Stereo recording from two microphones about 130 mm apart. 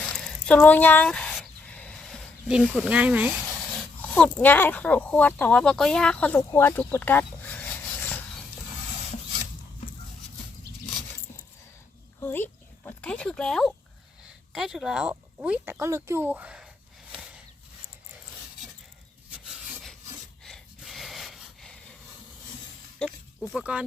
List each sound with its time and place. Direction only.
0.0 s a sound: 5° left (ahead or behind)
2.8 s speech: 10° right (ahead or behind)
3.8 s speech: 10° left (ahead or behind)
12.2 s a sound: 15° left (ahead or behind)
14.5 s speech: 5° right (ahead or behind)
15.6 s speech: 20° right (ahead or behind)
17.1 s a sound: 10° right (ahead or behind)
20.4 s wheeze: centre (ahead or behind)
23.0 s pig: 10° left (ahead or behind)
23.6 s speech: 10° right (ahead or behind)